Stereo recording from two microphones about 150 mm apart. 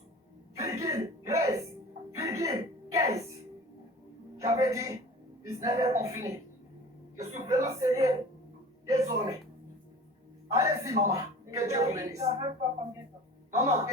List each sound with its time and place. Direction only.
0.6 s cough: 20° right (ahead or behind)
2.1 s music: 20° right (ahead or behind)
4.4 s a man's voice: 20° right (ahead or behind)
10.5 s a woman's voice: 20° right (ahead or behind)
13.6 s a woman's voice: 20° right (ahead or behind)